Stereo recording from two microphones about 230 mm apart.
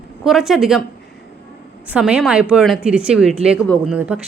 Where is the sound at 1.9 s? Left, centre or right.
Centre.